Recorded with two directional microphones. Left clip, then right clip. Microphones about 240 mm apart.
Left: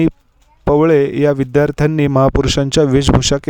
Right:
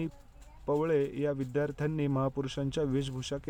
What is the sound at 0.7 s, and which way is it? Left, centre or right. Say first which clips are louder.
Speech: left 18 dB; left.